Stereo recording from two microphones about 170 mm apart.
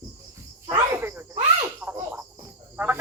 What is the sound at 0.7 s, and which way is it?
Cricket, 10° right (ahead or behind).